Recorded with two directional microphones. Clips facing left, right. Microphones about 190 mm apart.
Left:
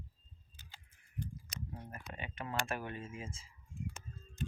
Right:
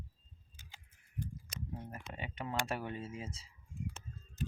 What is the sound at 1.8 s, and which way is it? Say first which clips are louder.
Speech: right 2 dB; 20° right (ahead or behind).